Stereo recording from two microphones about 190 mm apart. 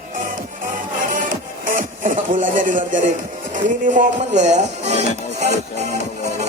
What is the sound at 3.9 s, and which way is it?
Speech, 40° right (ahead or behind).